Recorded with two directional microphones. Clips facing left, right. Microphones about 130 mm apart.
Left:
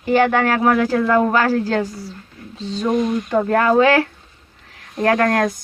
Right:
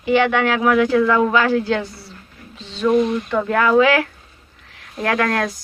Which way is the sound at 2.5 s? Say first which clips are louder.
Left 3 dB; 35° left (ahead or behind).